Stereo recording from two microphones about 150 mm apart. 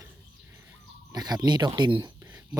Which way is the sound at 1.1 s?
25° right (ahead or behind).